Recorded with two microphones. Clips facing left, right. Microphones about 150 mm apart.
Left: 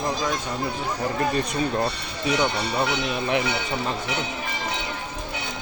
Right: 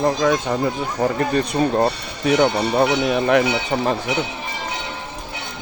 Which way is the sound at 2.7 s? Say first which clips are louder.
Right 7 dB; 55° right (ahead or behind).